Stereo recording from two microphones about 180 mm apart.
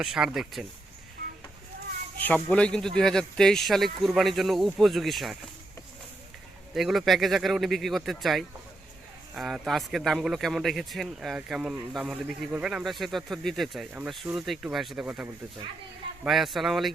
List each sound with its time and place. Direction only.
0.0 s a man's voice: 5° right (ahead or behind)
1.2 s a sound: 55° right (ahead or behind)
2.2 s a man's voice: 5° left (ahead or behind)
6.7 s a man's voice: centre (ahead or behind)